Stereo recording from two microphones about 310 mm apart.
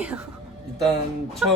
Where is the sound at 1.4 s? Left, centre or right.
Centre.